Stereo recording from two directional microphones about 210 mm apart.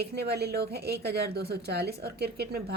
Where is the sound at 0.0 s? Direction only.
50° right (ahead or behind).